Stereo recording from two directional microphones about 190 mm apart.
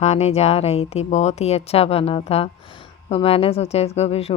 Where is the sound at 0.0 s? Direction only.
35° left (ahead or behind).